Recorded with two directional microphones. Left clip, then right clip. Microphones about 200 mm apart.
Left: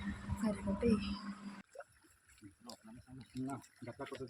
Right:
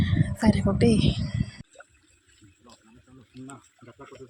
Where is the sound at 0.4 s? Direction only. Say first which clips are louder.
Right 13 dB; 45° right (ahead or behind).